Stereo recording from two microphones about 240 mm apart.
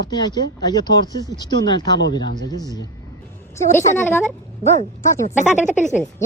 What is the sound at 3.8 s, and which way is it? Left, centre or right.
Speech, centre.